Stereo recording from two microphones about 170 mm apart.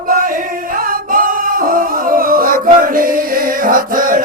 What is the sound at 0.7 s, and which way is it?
Singing, 55° right (ahead or behind).